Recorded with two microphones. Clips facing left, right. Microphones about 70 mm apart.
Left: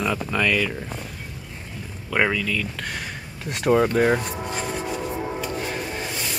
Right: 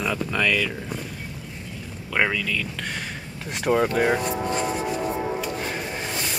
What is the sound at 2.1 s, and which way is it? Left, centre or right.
Speech, centre.